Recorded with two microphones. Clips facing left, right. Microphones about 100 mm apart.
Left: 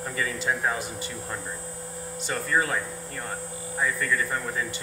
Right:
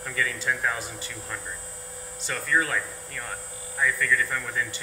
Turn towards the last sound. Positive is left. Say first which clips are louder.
# even
turn(degrees=25)  # may be behind; listen again after turning